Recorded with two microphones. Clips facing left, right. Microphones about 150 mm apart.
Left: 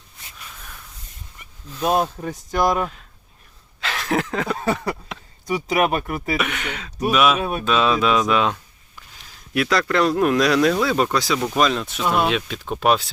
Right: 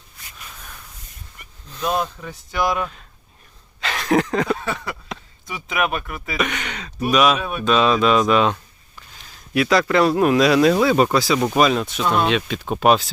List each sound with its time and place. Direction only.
1.8 s speech: 40° left (ahead or behind)
3.8 s a sound: centre (ahead or behind)
4.5 s speech: 35° left (ahead or behind)
6.3 s speech: 5° left (ahead or behind)
7.3 s speech: 40° left (ahead or behind)
7.6 s speech: centre (ahead or behind)